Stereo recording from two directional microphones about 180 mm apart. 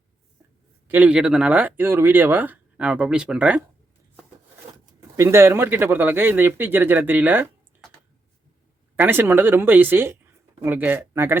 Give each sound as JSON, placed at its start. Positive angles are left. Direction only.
{"t": 0.9, "sound": "speech", "side_deg": -10}
{"t": 5.1, "sound": "speech", "side_deg": -15}
{"t": 9.0, "sound": "speech", "side_deg": -10}